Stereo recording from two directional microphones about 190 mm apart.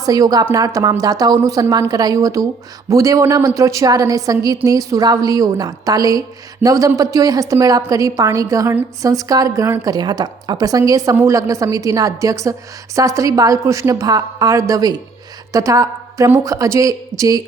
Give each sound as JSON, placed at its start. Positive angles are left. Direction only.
{"t": 0.0, "sound": "a woman's voice", "side_deg": -20}